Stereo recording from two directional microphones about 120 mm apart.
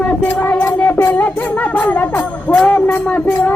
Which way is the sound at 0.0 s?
10° left (ahead or behind).